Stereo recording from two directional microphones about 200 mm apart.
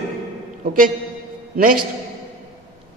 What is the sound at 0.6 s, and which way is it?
Speech, 45° right (ahead or behind).